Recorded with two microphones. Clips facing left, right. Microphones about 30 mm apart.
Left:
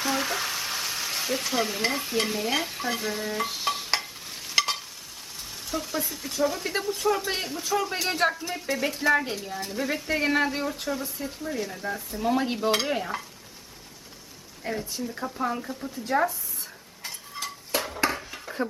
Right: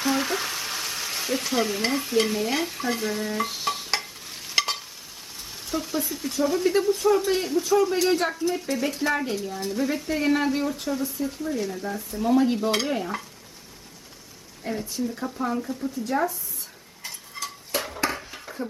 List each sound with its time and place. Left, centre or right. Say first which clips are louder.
0.0 s frying: right 2 dB; centre
5.6 s speech: right 3 dB; centre
14.6 s speech: right 2 dB; centre
15.5 s speech: right 5 dB; centre
17.0 s a sound: even; centre